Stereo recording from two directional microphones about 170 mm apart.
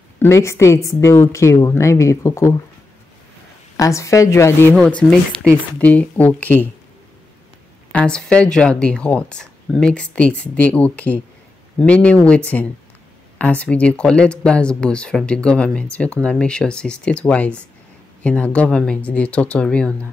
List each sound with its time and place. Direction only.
0.2 s speech: 15° left (ahead or behind)
3.7 s speech: 20° left (ahead or behind)
4.7 s speech: 5° left (ahead or behind)
7.9 s speech: 5° left (ahead or behind)